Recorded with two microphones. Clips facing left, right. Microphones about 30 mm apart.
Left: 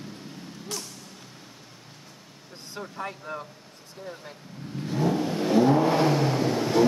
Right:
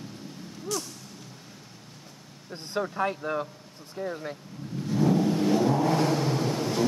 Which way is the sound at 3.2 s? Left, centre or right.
Right.